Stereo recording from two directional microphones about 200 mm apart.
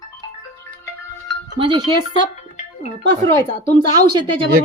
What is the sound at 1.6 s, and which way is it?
Speech, 25° right (ahead or behind).